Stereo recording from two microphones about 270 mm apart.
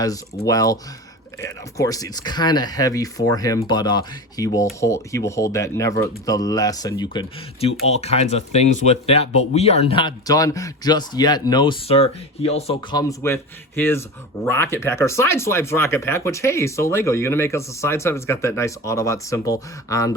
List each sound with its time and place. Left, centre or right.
0.0 s speech: centre